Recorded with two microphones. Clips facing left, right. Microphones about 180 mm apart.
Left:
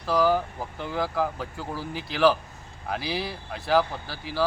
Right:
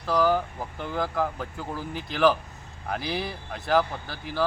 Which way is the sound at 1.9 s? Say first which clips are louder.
Even; 55° right (ahead or behind).